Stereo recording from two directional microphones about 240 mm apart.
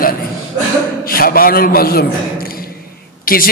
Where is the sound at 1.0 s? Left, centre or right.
Left.